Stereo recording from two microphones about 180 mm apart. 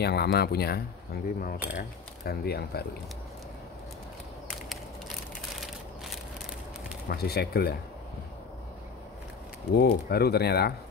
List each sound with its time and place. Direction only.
0.0 s speech: 65° left (ahead or behind)
7.1 s speech: 60° left (ahead or behind)
9.8 s speech: 60° left (ahead or behind)